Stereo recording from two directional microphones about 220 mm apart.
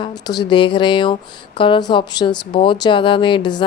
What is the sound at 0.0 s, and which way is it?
Speech, 20° left (ahead or behind).